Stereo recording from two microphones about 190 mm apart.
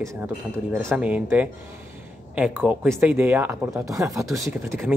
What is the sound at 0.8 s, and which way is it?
A man's voice, 5° right (ahead or behind).